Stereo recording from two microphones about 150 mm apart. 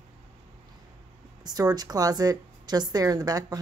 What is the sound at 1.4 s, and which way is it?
A woman's voice, 25° right (ahead or behind).